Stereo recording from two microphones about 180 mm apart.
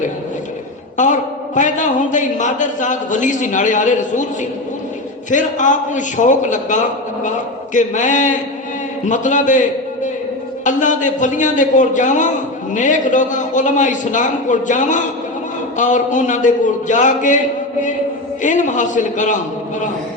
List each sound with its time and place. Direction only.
0.9 s a man's voice: 45° left (ahead or behind)
5.3 s a man's voice: 45° left (ahead or behind)